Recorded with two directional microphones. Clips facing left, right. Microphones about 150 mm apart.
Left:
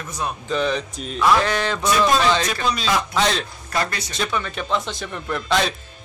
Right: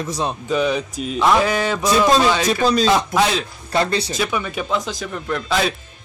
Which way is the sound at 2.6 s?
35° right (ahead or behind).